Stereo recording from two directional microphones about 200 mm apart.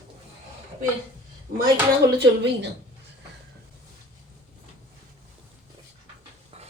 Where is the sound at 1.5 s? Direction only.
45° right (ahead or behind).